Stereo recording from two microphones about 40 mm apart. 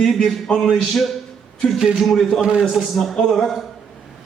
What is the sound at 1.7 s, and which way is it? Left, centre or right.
Speech, centre.